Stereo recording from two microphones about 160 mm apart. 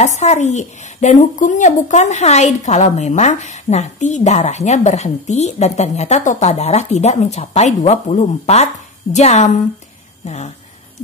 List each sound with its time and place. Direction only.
0.0 s speech: 45° left (ahead or behind)